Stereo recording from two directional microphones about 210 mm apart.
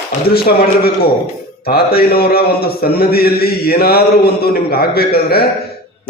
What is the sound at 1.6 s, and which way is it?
A man's voice, 45° left (ahead or behind).